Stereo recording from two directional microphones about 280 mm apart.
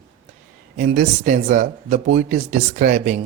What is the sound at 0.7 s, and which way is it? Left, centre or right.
Speech, right.